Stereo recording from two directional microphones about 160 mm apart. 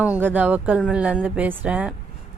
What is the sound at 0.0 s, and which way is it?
A woman's voice, 10° right (ahead or behind).